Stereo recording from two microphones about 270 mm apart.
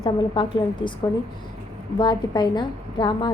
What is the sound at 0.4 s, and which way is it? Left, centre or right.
Speech, centre.